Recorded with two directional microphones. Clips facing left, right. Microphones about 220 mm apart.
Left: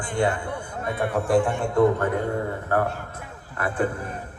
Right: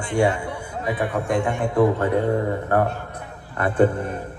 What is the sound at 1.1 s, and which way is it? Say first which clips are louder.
Speech: left 5 dB; centre (ahead or behind).